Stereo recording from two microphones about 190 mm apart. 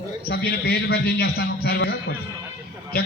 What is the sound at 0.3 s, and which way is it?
A man's voice, 60° left (ahead or behind).